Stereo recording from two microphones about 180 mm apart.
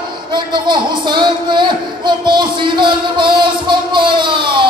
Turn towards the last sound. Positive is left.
turn(degrees=-25)  # may be behind; listen again after turning